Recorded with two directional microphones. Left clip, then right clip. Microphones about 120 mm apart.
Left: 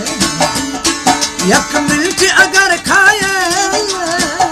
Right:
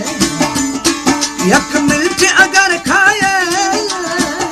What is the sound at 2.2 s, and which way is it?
Music, 30° left (ahead or behind).